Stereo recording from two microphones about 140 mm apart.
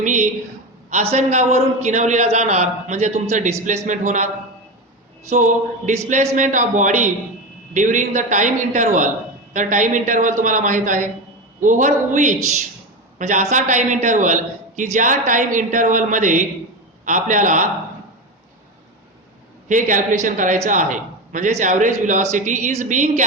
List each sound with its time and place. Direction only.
0.0 s a woman's voice: 65° right (ahead or behind)
5.3 s a man's voice: 65° right (ahead or behind)
19.6 s a man's voice: 65° right (ahead or behind)